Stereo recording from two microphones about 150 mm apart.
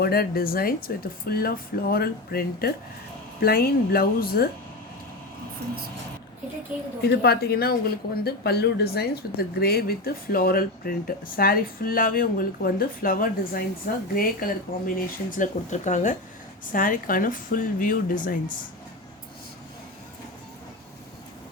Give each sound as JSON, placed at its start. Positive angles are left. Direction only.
{"t": 0.0, "sound": "a woman's voice", "side_deg": 90}
{"t": 6.7, "sound": "a woman's voice", "side_deg": -10}
{"t": 7.1, "sound": "a woman's voice", "side_deg": 90}
{"t": 16.7, "sound": "speech", "side_deg": 70}